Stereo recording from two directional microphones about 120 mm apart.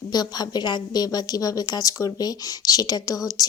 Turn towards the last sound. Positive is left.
turn(degrees=30)  # may be behind; listen again after turning